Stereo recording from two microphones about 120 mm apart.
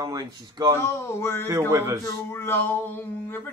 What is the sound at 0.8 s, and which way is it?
Speech, 20° left (ahead or behind).